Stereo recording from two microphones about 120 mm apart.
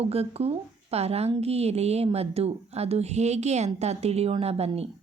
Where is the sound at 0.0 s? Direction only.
60° right (ahead or behind).